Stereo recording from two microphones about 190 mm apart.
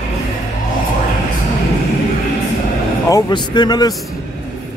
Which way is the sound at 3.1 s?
20° left (ahead or behind).